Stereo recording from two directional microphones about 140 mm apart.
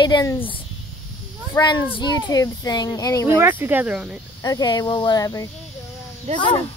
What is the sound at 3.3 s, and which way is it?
Speech, 15° right (ahead or behind).